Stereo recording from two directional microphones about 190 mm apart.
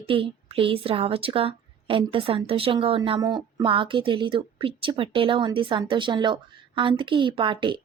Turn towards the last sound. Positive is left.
turn(degrees=-25)  # may be behind; listen again after turning